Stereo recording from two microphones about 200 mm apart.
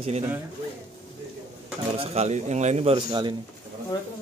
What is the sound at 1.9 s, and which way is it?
A man's voice, 35° right (ahead or behind).